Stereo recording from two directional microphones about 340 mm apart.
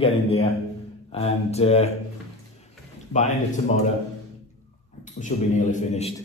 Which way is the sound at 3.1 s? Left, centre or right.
Left.